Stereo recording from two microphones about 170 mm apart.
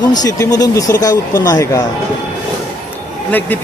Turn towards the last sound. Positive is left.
turn(degrees=10)  # may be behind; listen again after turning